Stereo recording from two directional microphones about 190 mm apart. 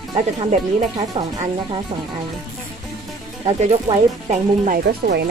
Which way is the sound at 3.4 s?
35° right (ahead or behind).